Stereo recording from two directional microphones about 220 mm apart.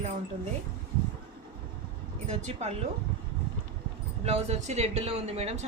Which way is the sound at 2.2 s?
30° right (ahead or behind).